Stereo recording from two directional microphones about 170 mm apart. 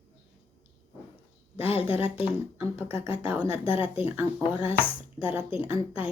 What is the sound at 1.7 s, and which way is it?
Speech, 35° left (ahead or behind).